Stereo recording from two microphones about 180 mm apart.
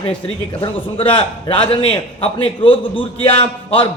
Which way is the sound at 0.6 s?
30° left (ahead or behind).